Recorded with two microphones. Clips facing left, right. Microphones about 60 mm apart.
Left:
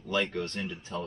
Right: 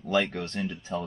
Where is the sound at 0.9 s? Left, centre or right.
Centre.